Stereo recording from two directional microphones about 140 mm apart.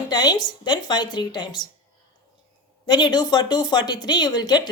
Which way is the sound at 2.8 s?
30° left (ahead or behind).